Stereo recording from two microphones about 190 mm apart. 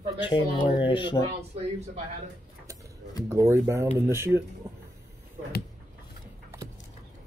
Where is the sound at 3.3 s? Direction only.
15° right (ahead or behind).